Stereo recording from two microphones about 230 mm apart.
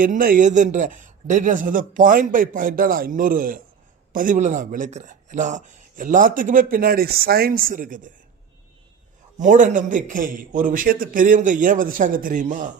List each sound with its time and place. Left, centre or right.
0.0 s speech: right
9.4 s speech: right